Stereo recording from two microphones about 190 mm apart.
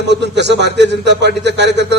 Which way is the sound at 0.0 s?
65° right (ahead or behind).